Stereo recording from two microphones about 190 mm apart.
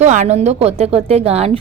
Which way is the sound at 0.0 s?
40° right (ahead or behind).